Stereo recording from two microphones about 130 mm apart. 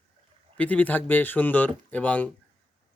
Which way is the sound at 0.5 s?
10° left (ahead or behind).